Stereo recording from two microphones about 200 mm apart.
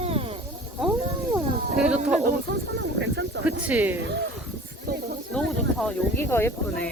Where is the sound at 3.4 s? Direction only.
10° right (ahead or behind).